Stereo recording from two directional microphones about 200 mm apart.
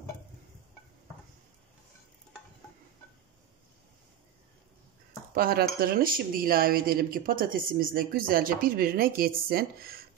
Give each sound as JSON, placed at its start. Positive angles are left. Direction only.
{"t": 5.3, "sound": "speech", "side_deg": -50}